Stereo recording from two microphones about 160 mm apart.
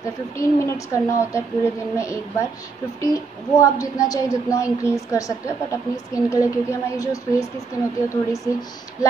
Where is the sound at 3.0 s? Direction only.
20° left (ahead or behind).